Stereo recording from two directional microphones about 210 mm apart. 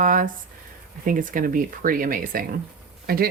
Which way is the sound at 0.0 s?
40° right (ahead or behind).